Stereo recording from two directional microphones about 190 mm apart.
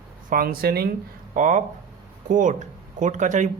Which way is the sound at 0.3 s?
50° right (ahead or behind).